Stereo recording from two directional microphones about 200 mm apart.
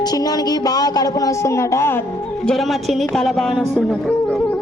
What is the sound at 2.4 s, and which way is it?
Speech, centre (ahead or behind).